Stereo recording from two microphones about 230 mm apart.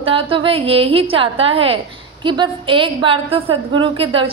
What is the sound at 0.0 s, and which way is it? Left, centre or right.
A woman's voice, right.